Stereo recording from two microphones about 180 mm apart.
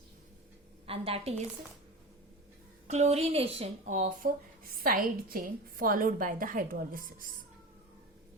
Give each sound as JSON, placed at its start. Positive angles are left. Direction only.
{"t": 0.9, "sound": "a woman's voice", "side_deg": -30}
{"t": 2.8, "sound": "a woman's voice", "side_deg": -40}